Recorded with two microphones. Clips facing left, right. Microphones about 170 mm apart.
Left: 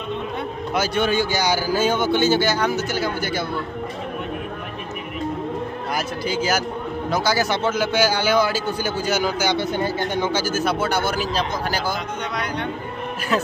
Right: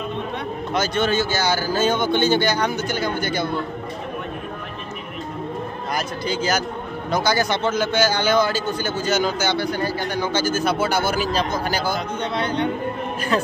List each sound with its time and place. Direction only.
0.7 s a man's voice: 10° left (ahead or behind)
5.9 s a man's voice: 5° left (ahead or behind)
9.6 s speech: 20° left (ahead or behind)
10.3 s speech: 10° left (ahead or behind)
13.3 s a man's voice: 5° left (ahead or behind)